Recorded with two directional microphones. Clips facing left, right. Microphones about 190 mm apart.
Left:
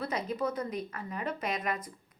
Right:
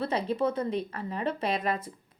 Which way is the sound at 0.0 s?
30° right (ahead or behind).